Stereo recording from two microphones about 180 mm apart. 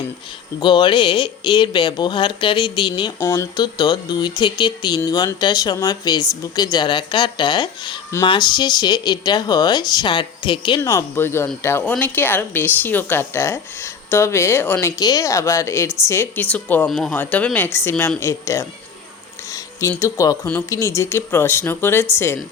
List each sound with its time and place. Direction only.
0.6 s speech: 25° left (ahead or behind)
10.8 s speech: 15° left (ahead or behind)
19.9 s speech: 15° left (ahead or behind)